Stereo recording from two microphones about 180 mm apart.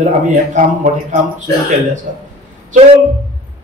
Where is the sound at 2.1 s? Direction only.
45° right (ahead or behind).